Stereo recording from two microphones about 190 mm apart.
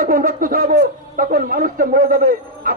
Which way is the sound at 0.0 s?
50° right (ahead or behind).